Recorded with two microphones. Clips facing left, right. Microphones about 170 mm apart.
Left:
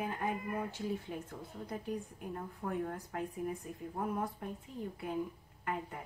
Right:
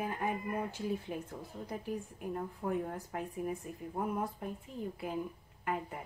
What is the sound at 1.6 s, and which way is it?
Speech, 5° right (ahead or behind).